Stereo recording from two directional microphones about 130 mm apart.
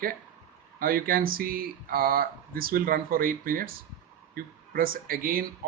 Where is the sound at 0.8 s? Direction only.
90° right.